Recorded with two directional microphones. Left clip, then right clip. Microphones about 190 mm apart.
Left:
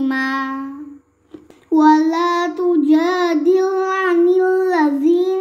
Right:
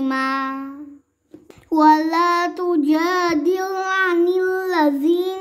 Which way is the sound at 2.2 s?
45° right (ahead or behind).